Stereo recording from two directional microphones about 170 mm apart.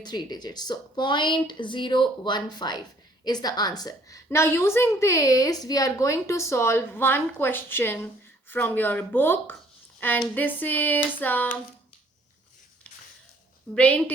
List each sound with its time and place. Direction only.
0.0 s a woman's voice: 25° left (ahead or behind)
13.7 s a woman's voice: 5° left (ahead or behind)